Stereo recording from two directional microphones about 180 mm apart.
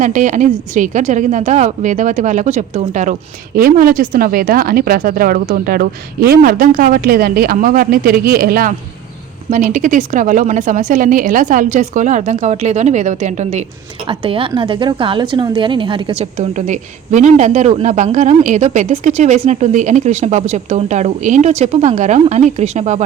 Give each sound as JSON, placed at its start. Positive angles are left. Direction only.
{"t": 0.0, "sound": "a woman's voice", "side_deg": -45}
{"t": 14.1, "sound": "a woman's voice", "side_deg": -30}